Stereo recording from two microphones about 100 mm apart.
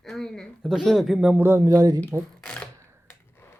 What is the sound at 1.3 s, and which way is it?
Speech, 25° right (ahead or behind).